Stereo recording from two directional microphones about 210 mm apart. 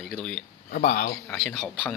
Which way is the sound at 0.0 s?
5° left (ahead or behind).